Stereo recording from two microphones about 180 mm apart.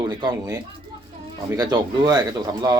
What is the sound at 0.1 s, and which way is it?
A man's voice, 20° right (ahead or behind).